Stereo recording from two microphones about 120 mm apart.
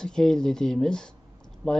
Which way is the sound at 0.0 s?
5° left (ahead or behind).